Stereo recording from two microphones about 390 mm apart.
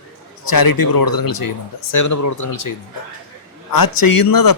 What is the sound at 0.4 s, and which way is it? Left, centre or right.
A man's voice, left.